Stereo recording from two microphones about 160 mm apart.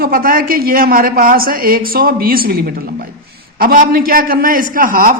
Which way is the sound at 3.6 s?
65° right (ahead or behind).